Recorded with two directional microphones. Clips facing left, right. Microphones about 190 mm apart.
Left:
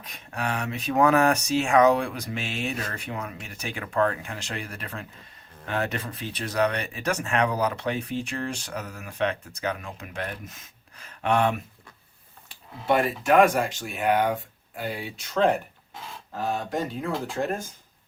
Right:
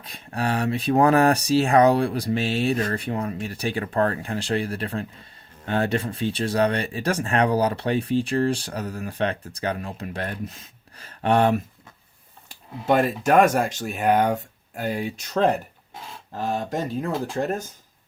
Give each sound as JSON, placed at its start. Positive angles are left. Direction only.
{"t": 0.0, "sound": "speech", "side_deg": -30}
{"t": 12.8, "sound": "speech", "side_deg": -45}